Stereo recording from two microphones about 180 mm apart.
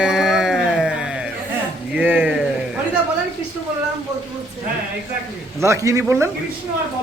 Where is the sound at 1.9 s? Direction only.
10° right (ahead or behind).